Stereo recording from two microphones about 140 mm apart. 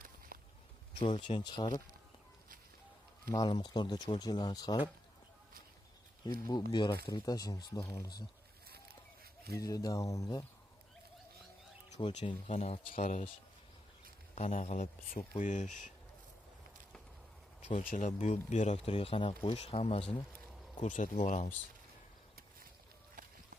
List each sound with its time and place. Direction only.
0.3 s walk: 90° right
0.9 s speech: 40° left (ahead or behind)
3.3 s speech: 30° left (ahead or behind)
6.5 s speech: 30° left (ahead or behind)
9.6 s speech: 25° left (ahead or behind)
11.9 s speech: 35° left (ahead or behind)
12.9 s speech: 60° left (ahead or behind)
14.3 s speech: 55° left (ahead or behind)
17.6 s a sound: 45° left (ahead or behind)
17.8 s speech: 65° left (ahead or behind); by 20.2 s 40° left (ahead or behind)
20.8 s speech: 65° left (ahead or behind)
23.2 s a sound: 70° right (ahead or behind)